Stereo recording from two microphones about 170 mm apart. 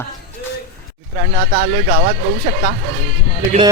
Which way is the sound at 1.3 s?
45° right (ahead or behind).